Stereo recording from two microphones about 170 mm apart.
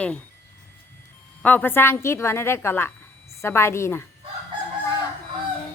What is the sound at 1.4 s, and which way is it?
Speech, 10° left (ahead or behind).